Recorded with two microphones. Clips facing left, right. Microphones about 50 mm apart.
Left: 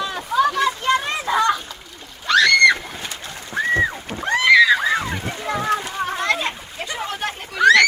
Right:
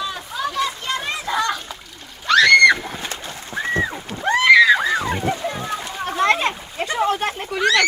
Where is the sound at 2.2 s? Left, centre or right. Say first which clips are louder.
Right 2 dB; centre.